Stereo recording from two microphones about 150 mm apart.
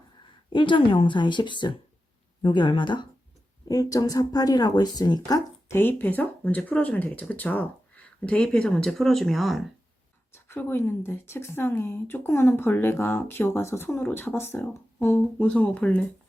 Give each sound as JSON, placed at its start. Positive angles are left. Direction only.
{"t": 0.5, "sound": "speech", "side_deg": 35}
{"t": 10.3, "sound": "speech", "side_deg": 15}